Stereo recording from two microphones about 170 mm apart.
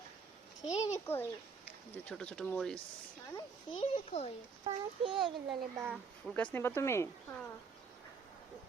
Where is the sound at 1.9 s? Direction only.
5° left (ahead or behind).